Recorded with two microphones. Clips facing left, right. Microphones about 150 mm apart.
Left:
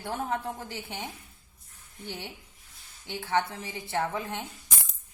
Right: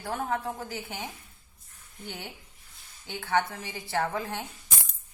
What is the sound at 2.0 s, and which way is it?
A woman's voice, 30° left (ahead or behind).